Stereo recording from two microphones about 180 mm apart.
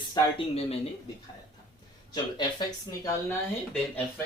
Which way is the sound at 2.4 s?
20° left (ahead or behind).